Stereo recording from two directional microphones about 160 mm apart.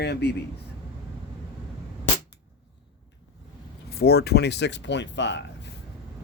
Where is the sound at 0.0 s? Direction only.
90° left.